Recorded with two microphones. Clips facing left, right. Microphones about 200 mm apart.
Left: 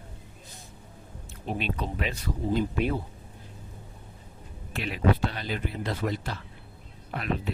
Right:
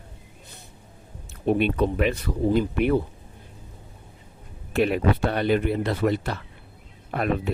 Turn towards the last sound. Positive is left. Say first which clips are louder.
# right 9 dB
turn(degrees=-50)  # may be behind; listen again after turning